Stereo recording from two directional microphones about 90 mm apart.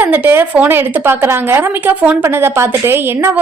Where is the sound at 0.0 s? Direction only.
20° right (ahead or behind).